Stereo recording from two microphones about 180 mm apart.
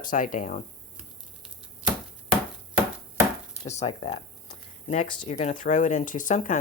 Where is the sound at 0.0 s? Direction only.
50° left (ahead or behind).